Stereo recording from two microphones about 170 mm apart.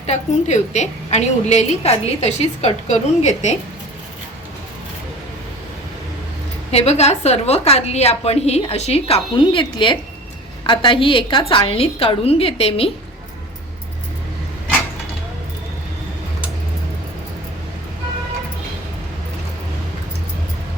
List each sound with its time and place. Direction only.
0.0 s a woman's voice: 40° left (ahead or behind)
6.7 s a woman's voice: 40° left (ahead or behind)